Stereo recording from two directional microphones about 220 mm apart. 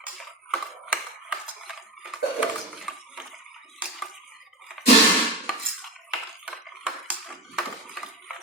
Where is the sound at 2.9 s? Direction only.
Centre (ahead or behind).